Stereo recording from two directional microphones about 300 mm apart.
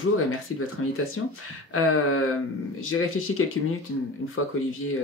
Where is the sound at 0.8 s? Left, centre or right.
Left.